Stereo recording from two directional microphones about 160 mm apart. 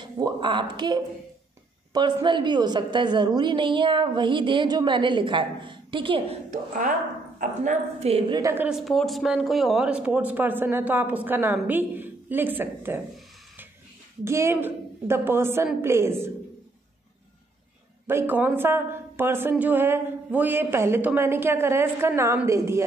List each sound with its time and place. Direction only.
0.0 s a woman's voice: 30° right (ahead or behind)
7.3 s a woman's voice: 50° right (ahead or behind)
8.4 s a woman's voice: 20° right (ahead or behind)
8.6 s speech: centre (ahead or behind)
14.2 s speech: 15° right (ahead or behind)
18.0 s speech: 10° right (ahead or behind)